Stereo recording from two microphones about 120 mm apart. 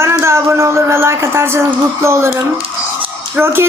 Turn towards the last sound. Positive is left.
turn(degrees=-20)  # may be behind; listen again after turning